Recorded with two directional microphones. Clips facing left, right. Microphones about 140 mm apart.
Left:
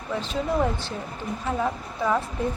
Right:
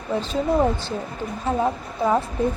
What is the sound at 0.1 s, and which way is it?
A woman's voice, 30° right (ahead or behind).